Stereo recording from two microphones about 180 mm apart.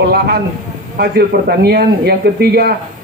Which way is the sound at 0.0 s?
60° right (ahead or behind).